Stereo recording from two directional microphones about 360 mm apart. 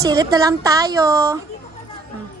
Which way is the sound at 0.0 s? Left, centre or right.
Centre.